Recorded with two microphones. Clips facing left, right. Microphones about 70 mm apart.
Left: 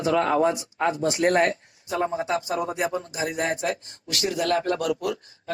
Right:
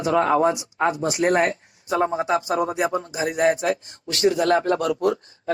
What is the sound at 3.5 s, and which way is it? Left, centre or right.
Speech, right.